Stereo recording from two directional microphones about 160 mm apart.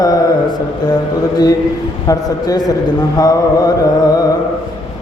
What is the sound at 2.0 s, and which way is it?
Music, 25° left (ahead or behind).